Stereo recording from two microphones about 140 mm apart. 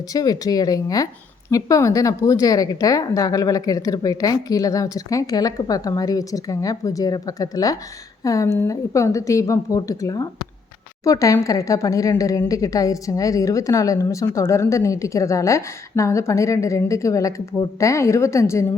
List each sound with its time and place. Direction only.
0.1 s a woman's voice: 25° left (ahead or behind)